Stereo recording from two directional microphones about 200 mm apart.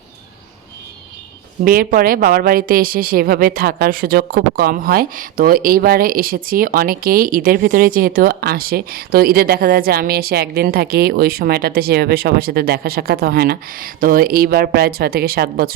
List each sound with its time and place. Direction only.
1.6 s speech: 45° right (ahead or behind)